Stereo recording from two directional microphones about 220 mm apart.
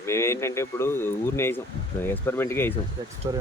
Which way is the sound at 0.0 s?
10° left (ahead or behind).